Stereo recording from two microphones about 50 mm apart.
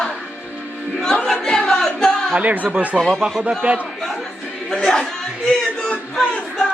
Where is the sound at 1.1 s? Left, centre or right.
Centre.